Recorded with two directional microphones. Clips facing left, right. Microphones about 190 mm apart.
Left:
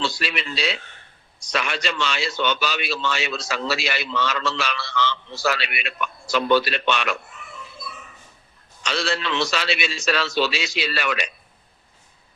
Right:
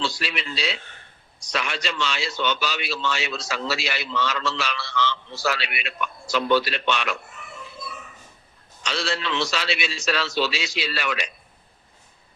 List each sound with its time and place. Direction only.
0.0 s a man's voice: 60° left (ahead or behind)
8.8 s a man's voice: 55° left (ahead or behind)